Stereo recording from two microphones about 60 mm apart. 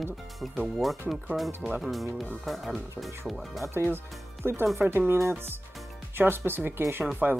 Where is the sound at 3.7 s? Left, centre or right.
Right.